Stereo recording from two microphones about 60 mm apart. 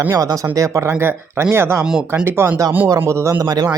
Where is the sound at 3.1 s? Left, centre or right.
Right.